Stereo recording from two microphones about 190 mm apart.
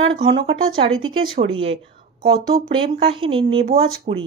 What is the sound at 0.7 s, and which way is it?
Speech, 90° right.